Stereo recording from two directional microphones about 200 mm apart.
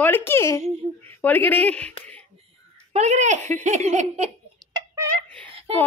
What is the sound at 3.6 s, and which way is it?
Giggle, 35° right (ahead or behind).